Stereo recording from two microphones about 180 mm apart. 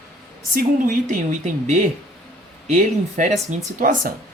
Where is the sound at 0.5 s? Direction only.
45° right (ahead or behind).